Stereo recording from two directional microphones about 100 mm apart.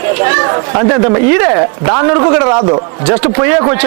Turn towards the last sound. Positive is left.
turn(degrees=-30)  # may be behind; listen again after turning